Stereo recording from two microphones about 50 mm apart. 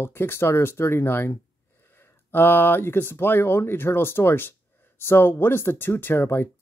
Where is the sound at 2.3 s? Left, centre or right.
Left.